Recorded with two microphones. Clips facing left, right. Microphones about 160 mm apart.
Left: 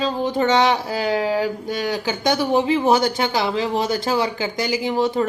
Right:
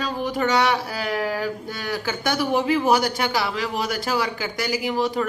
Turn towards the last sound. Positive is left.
turn(degrees=25)  # may be behind; listen again after turning